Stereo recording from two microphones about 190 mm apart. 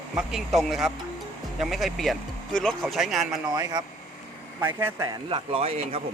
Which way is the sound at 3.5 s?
20° right (ahead or behind).